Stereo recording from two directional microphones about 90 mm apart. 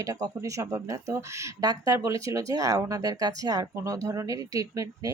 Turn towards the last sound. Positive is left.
turn(degrees=-40)  # may be behind; listen again after turning